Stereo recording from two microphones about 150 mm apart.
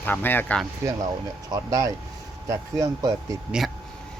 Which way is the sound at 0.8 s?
20° right (ahead or behind).